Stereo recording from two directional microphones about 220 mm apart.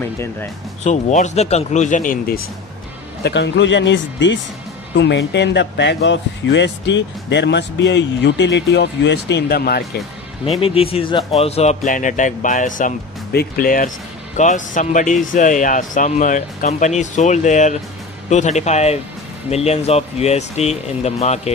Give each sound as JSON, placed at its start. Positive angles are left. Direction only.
{"t": 0.8, "sound": "speech", "side_deg": 30}
{"t": 3.3, "sound": "speech", "side_deg": 55}
{"t": 10.4, "sound": "speech", "side_deg": 25}